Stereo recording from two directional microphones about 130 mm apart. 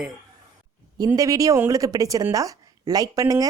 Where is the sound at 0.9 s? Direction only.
30° right (ahead or behind).